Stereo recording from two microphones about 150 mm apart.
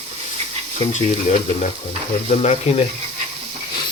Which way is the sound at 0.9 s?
50° left (ahead or behind).